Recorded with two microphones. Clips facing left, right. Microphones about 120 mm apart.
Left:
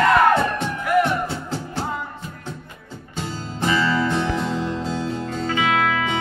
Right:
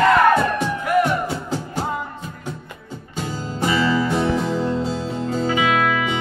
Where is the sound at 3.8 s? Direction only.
10° right (ahead or behind).